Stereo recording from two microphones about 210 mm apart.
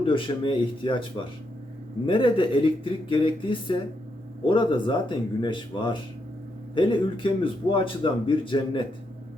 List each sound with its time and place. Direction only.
0.0 s a man's voice: 25° left (ahead or behind)
2.0 s a man's voice: 25° left (ahead or behind)